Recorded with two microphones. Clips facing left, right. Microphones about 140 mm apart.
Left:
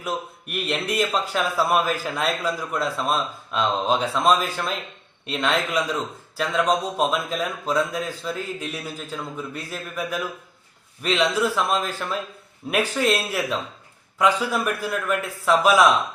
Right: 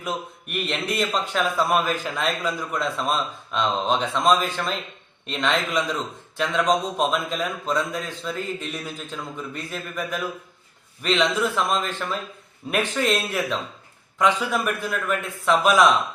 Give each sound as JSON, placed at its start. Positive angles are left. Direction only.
{"t": 0.0, "sound": "a man's voice", "side_deg": 5}